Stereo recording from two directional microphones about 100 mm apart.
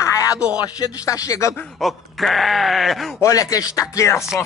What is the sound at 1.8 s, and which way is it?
Speech, centre (ahead or behind).